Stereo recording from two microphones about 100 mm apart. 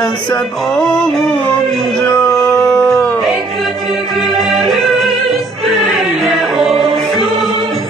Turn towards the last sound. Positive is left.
turn(degrees=-5)  # may be behind; listen again after turning